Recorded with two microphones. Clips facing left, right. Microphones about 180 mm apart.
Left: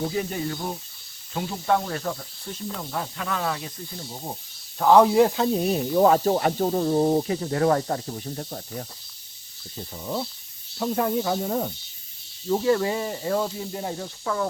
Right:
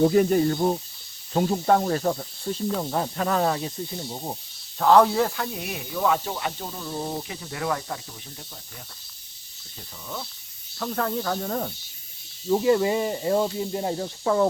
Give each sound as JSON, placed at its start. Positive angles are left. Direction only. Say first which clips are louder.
{"t": 0.0, "sound": "speech", "louder": "right 9 dB", "side_deg": -55}
{"t": 1.3, "sound": "snake", "louder": "right 4 dB", "side_deg": -40}
{"t": 3.8, "sound": "snake", "louder": "right 3 dB", "side_deg": -20}
{"t": 4.8, "sound": "speech", "louder": "left 2 dB", "side_deg": 15}
{"t": 5.5, "sound": "speech", "louder": "left 10 dB", "side_deg": 35}
{"t": 10.8, "sound": "speech", "louder": "left 3 dB", "side_deg": 15}
{"t": 12.6, "sound": "speech", "louder": "right 2 dB", "side_deg": -15}